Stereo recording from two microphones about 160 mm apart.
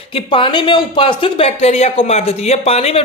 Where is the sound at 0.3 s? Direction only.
30° left (ahead or behind).